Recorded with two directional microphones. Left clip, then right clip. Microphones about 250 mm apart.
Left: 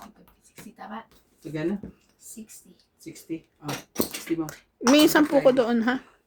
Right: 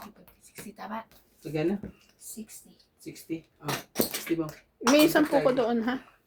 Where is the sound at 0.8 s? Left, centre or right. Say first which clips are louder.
Right 1 dB; right.